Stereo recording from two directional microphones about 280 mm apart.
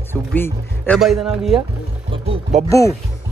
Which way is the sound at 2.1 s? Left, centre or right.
Centre.